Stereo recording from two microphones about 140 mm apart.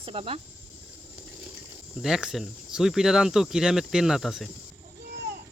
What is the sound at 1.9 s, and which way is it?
Speech, 5° right (ahead or behind).